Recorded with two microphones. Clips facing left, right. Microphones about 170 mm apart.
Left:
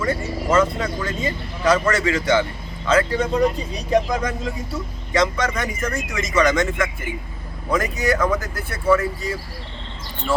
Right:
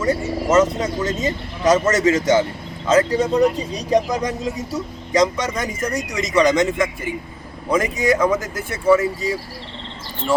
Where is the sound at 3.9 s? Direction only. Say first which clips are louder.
Right 1 dB; 15° right (ahead or behind).